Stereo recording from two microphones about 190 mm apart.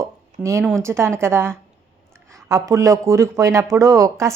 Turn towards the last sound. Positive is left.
turn(degrees=-15)  # may be behind; listen again after turning